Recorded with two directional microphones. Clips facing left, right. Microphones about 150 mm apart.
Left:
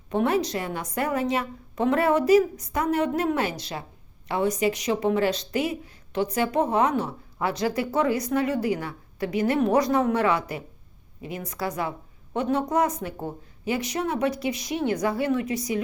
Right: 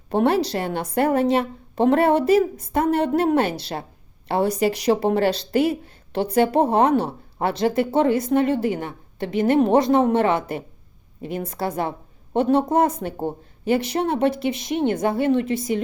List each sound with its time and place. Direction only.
0.1 s a woman's voice: 30° right (ahead or behind)
5.5 s speech: 60° right (ahead or behind)
6.5 s a woman's voice: 30° right (ahead or behind)